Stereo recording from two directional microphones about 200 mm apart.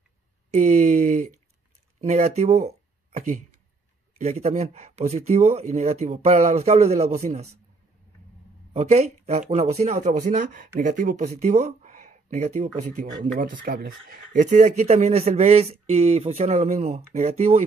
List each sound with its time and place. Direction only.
0.5 s a sound: 35° right (ahead or behind)
2.0 s speech: 35° right (ahead or behind)
8.7 s speech: 35° right (ahead or behind)